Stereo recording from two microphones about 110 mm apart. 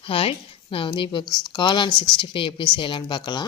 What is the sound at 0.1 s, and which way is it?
A woman's voice, 60° left (ahead or behind).